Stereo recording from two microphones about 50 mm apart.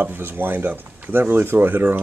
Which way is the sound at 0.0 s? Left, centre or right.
Right.